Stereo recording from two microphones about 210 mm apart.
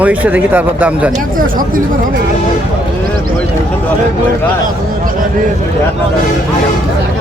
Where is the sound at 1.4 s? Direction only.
40° right (ahead or behind).